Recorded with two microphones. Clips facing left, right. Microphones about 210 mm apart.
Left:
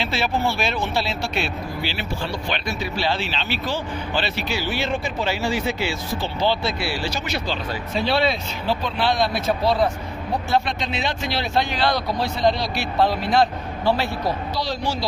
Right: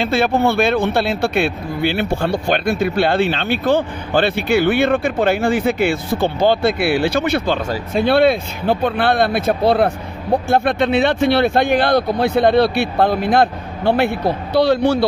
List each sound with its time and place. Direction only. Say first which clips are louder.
0.0 s a man's voice: right 7 dB; 55° right (ahead or behind)